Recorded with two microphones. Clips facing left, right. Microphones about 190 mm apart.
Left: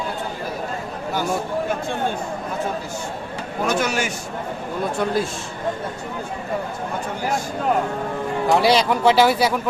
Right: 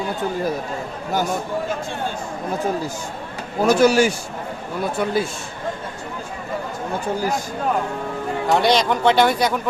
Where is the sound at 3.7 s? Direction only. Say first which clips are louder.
Right 10 dB; 35° right (ahead or behind).